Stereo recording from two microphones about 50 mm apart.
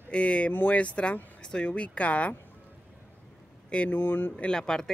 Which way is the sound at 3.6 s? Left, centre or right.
Left.